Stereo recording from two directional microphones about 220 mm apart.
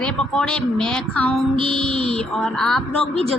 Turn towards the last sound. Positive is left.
turn(degrees=5)  # may be behind; listen again after turning